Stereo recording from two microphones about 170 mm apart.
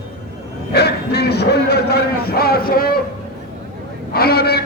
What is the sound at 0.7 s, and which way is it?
A man's voice, 75° left (ahead or behind).